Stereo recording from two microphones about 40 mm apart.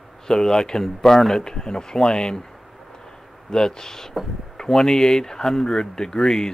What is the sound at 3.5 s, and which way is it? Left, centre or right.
Speech, centre.